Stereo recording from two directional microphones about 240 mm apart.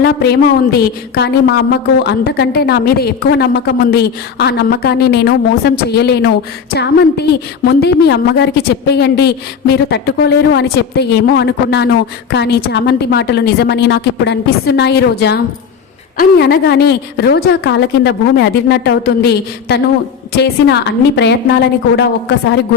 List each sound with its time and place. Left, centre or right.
0.7 s a woman's voice: left